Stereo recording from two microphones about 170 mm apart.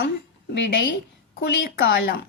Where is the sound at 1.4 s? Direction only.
90° left.